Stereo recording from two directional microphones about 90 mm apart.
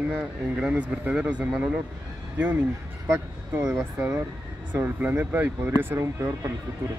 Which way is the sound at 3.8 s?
20° right (ahead or behind).